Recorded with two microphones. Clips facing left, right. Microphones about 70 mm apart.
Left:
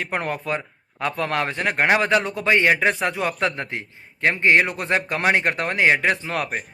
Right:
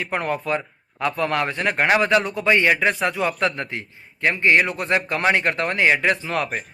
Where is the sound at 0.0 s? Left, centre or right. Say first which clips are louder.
Right 2 dB; left.